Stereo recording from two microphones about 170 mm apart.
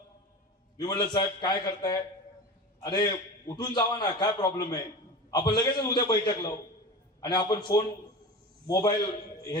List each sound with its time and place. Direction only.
0.8 s a man's voice: 25° left (ahead or behind)